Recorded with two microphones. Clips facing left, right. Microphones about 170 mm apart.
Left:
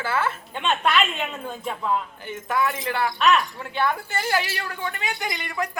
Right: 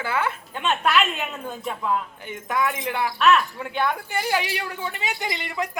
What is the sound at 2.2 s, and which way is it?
Speech, 15° right (ahead or behind).